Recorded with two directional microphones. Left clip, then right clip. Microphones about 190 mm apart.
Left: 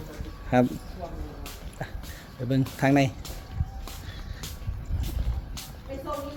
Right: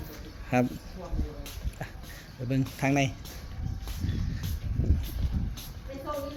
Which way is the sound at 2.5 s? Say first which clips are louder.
Left 5 dB; 30° left (ahead or behind).